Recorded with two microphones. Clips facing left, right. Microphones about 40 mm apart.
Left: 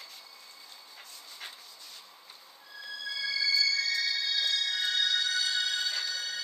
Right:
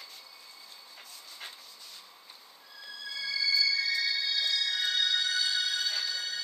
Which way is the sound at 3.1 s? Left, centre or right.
Centre.